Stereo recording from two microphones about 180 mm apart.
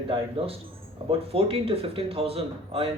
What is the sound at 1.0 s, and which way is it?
Speech, 30° right (ahead or behind).